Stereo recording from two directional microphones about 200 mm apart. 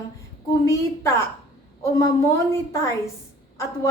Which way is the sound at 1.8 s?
15° left (ahead or behind).